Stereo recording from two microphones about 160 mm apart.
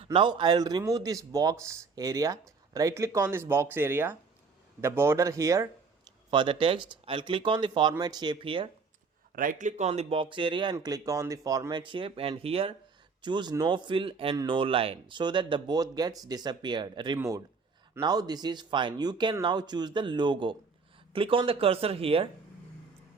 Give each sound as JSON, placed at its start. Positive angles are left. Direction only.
{"t": 0.0, "sound": "a man's voice", "side_deg": -30}
{"t": 6.3, "sound": "speech", "side_deg": -30}
{"t": 9.3, "sound": "a man's voice", "side_deg": -60}